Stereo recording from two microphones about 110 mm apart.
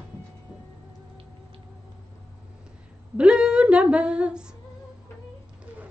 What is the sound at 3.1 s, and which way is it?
Female singing, 10° right (ahead or behind).